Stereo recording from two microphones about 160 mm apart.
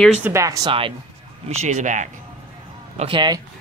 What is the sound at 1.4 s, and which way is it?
Speech, 50° right (ahead or behind).